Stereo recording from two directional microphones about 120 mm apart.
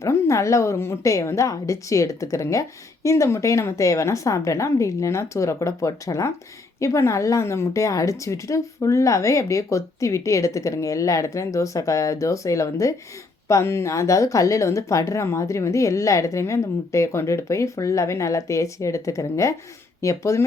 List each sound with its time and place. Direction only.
0.0 s a woman's voice: 25° left (ahead or behind)